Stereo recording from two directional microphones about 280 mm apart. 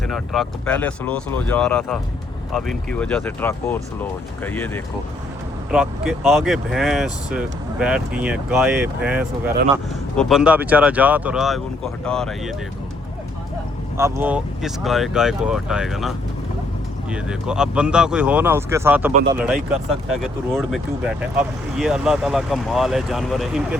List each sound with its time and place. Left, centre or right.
0.1 s speech: centre
13.9 s speech: centre